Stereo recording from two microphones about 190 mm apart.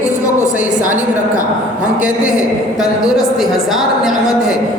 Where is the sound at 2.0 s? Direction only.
5° right (ahead or behind).